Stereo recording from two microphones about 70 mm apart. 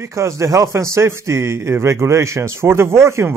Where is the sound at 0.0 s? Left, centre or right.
Right.